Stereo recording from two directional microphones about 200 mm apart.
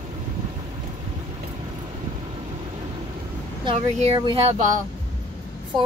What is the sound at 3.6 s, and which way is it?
Speech, 30° right (ahead or behind).